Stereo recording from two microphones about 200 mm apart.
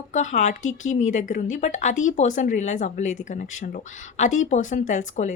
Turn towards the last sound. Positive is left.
turn(degrees=40)  # may be behind; listen again after turning